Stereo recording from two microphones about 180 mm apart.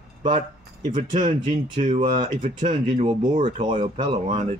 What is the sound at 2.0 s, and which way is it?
Speech, 45° right (ahead or behind).